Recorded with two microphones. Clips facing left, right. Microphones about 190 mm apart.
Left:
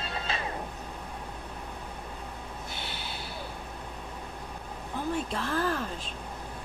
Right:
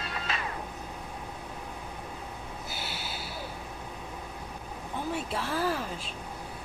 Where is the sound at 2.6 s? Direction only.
5° right (ahead or behind).